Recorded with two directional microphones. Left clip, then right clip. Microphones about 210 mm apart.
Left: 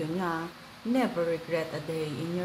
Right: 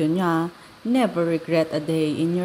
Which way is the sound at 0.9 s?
35° right (ahead or behind).